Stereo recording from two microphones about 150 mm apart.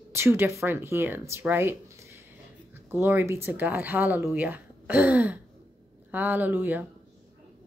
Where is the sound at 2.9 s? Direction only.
15° right (ahead or behind).